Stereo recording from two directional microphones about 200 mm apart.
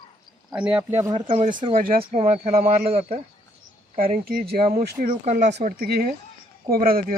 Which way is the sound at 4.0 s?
45° right (ahead or behind).